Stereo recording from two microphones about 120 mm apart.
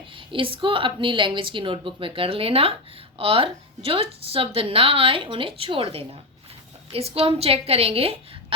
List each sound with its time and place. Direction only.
0.2 s a woman's voice: 45° right (ahead or behind)